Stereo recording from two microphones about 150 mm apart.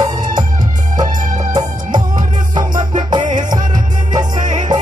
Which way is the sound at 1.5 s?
25° right (ahead or behind).